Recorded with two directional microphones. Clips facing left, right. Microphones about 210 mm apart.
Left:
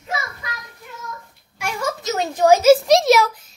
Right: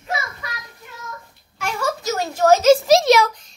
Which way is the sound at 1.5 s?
15° left (ahead or behind).